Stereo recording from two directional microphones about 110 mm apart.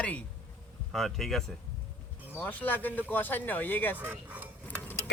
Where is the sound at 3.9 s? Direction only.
15° right (ahead or behind).